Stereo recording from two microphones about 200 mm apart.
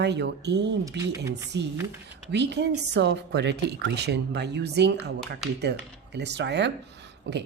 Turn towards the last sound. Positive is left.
turn(degrees=-60)  # may be behind; listen again after turning